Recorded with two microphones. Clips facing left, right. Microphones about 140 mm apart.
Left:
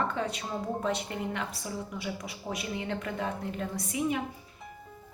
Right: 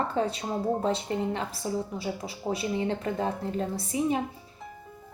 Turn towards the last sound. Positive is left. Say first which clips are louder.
# right 3 dB
turn(degrees=-30)  # may be behind; listen again after turning